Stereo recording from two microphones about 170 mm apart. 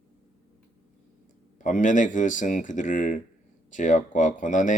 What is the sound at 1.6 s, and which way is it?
Speech, 50° left (ahead or behind).